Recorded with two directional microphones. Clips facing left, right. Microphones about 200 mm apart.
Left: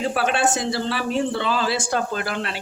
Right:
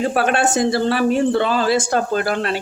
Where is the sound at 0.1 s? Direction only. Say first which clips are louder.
Right 4 dB; 50° right (ahead or behind).